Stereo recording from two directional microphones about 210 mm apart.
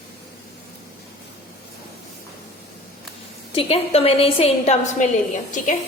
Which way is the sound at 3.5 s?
30° left (ahead or behind).